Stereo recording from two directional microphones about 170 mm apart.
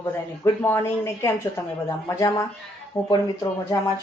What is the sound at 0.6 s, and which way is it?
Speech, 15° left (ahead or behind).